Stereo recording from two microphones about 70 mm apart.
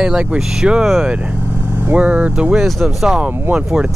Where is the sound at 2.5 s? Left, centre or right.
Centre.